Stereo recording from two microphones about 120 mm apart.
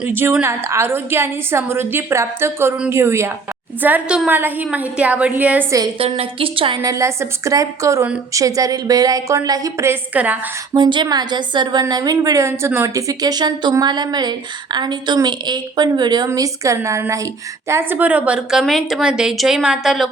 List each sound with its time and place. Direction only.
0.1 s a woman's voice: 15° right (ahead or behind)
6.0 s a woman's voice: 50° right (ahead or behind)
6.8 s a woman's voice: 25° right (ahead or behind)
10.8 s a woman's voice: 40° right (ahead or behind); by 20.1 s 5° right (ahead or behind)